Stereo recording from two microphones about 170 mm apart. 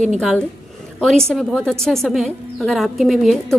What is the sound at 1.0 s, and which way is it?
A woman's voice, centre (ahead or behind).